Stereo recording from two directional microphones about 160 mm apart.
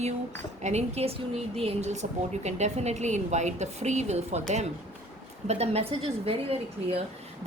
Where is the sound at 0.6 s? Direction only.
45° right (ahead or behind).